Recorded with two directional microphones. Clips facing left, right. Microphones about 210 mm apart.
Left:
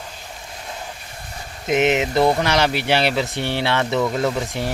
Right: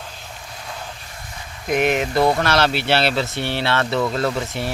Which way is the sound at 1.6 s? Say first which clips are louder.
Left 1 dB; 20° left (ahead or behind).